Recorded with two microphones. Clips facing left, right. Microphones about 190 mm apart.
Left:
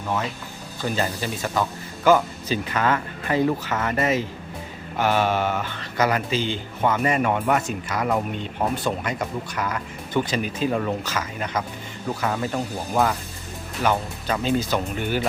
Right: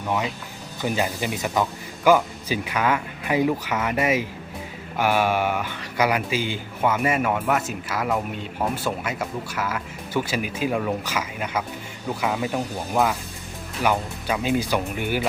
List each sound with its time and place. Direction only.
0.8 s speech: 10° right (ahead or behind)